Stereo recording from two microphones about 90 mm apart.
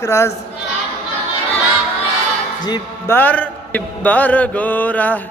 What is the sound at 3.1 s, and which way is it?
Mantra, 20° left (ahead or behind).